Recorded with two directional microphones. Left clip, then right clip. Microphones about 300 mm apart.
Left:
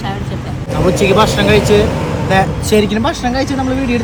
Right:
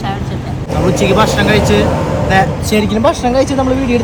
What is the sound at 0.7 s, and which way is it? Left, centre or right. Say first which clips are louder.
Speech: left 1 dB; centre.